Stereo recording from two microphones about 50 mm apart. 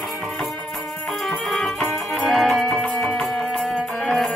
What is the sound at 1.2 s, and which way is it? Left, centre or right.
Music, centre.